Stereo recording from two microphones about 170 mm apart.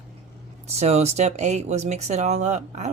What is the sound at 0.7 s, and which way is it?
Speech, 40° right (ahead or behind).